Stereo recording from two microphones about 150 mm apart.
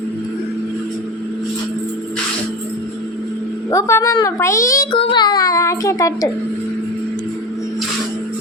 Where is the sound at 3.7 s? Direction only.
20° left (ahead or behind).